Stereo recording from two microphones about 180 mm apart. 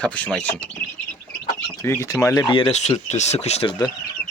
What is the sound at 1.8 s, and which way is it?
Speech, 15° left (ahead or behind).